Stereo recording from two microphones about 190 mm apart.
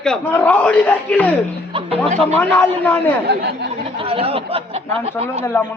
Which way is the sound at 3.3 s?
60° right (ahead or behind).